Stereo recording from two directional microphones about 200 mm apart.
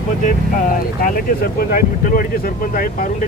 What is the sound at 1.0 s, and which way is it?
Speech, 45° left (ahead or behind).